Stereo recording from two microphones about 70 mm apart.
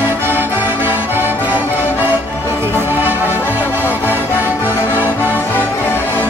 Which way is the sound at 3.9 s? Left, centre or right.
Left.